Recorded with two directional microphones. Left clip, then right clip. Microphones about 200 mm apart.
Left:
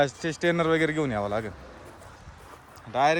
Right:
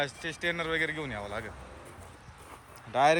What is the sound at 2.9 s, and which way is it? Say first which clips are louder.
Speech: left 1 dB; 15° left (ahead or behind).